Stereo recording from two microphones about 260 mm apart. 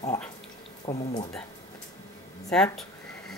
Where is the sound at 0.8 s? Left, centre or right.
Left.